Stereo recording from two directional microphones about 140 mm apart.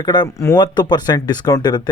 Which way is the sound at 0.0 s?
30° left (ahead or behind).